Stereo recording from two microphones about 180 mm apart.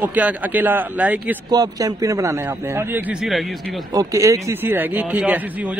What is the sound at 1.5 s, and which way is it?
A man's voice, 20° right (ahead or behind).